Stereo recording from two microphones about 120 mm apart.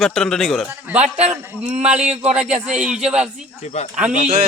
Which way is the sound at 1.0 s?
60° right (ahead or behind).